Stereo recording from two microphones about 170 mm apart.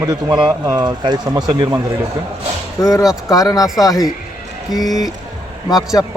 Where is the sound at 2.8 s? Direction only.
20° left (ahead or behind).